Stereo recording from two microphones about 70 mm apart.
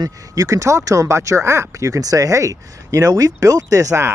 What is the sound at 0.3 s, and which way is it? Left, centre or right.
Speech, right.